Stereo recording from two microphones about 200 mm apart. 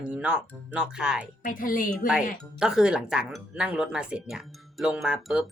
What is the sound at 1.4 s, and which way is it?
Speech, 45° left (ahead or behind).